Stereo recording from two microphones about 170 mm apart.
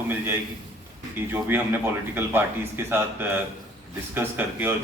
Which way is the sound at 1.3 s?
10° right (ahead or behind).